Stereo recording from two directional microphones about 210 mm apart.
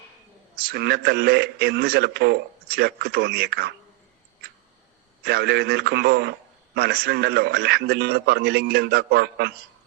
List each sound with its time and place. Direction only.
0.5 s a man's voice: 50° right (ahead or behind)
5.2 s a man's voice: 50° right (ahead or behind)